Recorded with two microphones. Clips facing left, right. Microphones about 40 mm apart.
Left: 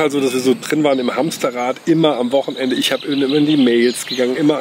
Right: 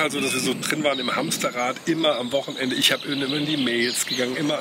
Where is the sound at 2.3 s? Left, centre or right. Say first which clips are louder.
Left 8 dB; left.